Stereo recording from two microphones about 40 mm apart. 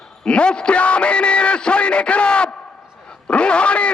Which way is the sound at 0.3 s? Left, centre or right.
Left.